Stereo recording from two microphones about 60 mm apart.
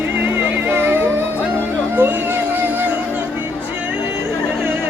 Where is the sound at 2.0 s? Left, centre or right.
Right.